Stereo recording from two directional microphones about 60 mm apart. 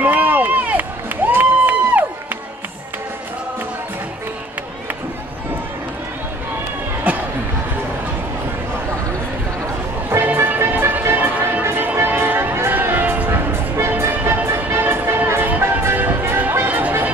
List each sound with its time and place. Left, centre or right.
0.0 s crowd: right
10.0 s music: right